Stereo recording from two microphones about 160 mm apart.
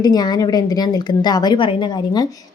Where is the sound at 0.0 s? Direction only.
25° left (ahead or behind).